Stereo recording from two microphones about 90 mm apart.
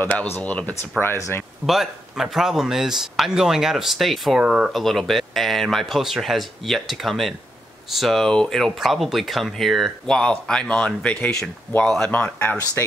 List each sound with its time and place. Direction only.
0.0 s speech: 20° left (ahead or behind)
1.1 s speech: 35° left (ahead or behind)
1.7 s speech: 5° right (ahead or behind)
12.1 s speech: 20° left (ahead or behind)